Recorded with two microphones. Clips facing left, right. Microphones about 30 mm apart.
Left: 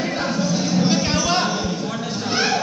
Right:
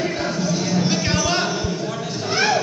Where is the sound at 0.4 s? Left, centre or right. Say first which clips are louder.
Left 1 dB; left.